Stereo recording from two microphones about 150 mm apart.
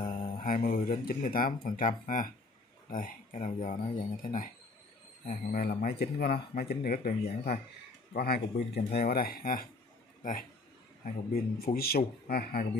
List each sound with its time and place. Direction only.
0.0 s mantra: 35° left (ahead or behind)
0.4 s speech: 70° left (ahead or behind)
11.3 s speech: 85° left